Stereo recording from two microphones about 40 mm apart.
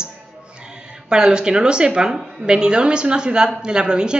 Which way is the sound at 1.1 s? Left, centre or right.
Centre.